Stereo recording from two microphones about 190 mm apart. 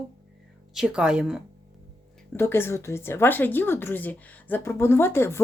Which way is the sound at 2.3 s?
10° left (ahead or behind).